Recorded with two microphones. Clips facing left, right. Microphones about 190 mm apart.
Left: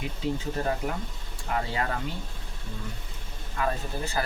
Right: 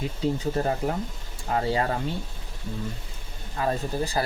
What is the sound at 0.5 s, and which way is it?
Speech, 35° right (ahead or behind).